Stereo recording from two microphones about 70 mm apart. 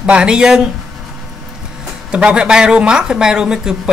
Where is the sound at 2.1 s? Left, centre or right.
Centre.